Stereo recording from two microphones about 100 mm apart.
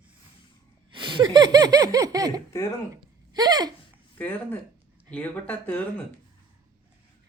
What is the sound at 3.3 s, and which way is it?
Speech, 45° right (ahead or behind).